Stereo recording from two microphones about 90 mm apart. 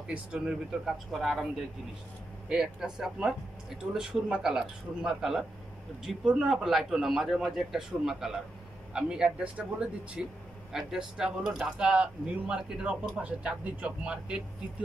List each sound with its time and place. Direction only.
0.0 s speech: 10° right (ahead or behind)
2.5 s a man's voice: 5° right (ahead or behind)